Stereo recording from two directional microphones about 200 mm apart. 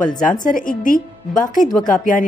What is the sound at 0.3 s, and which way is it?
Speech, 40° left (ahead or behind).